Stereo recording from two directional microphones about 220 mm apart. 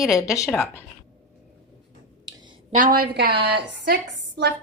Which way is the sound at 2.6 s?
35° right (ahead or behind).